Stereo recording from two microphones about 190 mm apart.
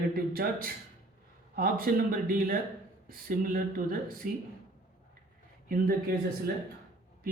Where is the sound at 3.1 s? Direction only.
50° right (ahead or behind).